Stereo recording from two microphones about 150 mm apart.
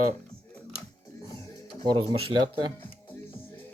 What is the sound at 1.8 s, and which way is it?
Speech, 35° right (ahead or behind).